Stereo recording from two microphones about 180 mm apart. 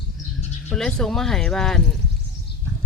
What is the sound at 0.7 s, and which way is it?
Speech, 5° left (ahead or behind).